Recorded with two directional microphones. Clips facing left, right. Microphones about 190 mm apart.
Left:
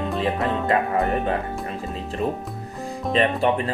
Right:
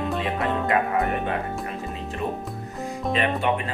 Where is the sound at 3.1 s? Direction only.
35° left (ahead or behind).